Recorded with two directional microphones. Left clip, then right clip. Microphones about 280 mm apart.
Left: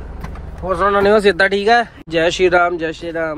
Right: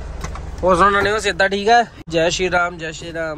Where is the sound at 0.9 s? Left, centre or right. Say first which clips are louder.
Left 5 dB; centre.